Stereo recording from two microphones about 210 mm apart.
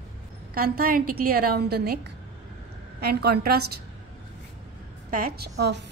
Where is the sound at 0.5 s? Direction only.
45° right (ahead or behind).